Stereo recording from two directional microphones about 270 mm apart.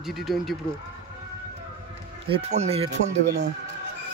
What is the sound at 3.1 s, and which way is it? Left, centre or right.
Speech, right.